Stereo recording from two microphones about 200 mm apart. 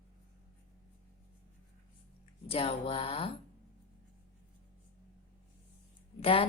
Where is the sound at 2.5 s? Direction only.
30° left (ahead or behind).